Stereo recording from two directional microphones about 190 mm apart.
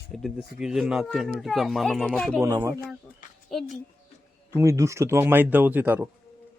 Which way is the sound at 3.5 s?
Centre (ahead or behind).